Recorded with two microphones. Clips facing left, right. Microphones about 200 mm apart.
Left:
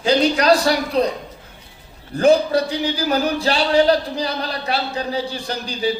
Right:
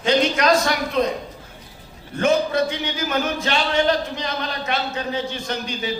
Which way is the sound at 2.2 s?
35° left (ahead or behind).